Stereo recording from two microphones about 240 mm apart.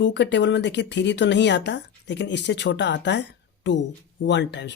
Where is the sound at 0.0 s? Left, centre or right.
Left.